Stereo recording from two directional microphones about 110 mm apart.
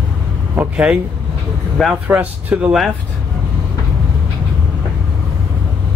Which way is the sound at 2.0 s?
15° right (ahead or behind).